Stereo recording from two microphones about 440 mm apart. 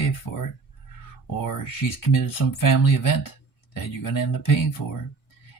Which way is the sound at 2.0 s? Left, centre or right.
Left.